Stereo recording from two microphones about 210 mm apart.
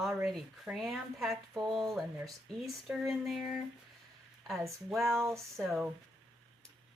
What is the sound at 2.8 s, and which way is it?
Speech, 10° right (ahead or behind).